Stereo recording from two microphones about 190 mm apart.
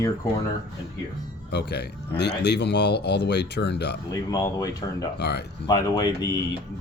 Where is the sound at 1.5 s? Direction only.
60° left (ahead or behind).